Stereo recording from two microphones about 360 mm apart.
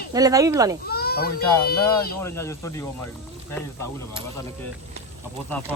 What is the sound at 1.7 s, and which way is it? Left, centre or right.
Speech, left.